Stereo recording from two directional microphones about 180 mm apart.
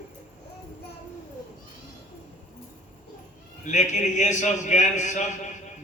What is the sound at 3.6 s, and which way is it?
A man's voice, 40° left (ahead or behind).